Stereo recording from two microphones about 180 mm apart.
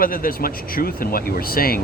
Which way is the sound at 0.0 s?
55° left (ahead or behind).